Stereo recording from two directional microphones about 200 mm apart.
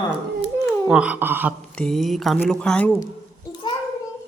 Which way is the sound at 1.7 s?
Centre (ahead or behind).